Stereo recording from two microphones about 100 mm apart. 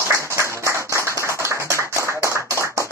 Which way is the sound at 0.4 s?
30° right (ahead or behind).